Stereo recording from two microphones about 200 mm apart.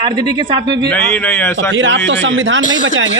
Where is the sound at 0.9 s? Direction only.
10° left (ahead or behind).